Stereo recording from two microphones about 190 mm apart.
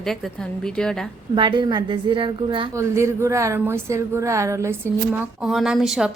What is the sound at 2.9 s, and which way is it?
Speech, 15° right (ahead or behind).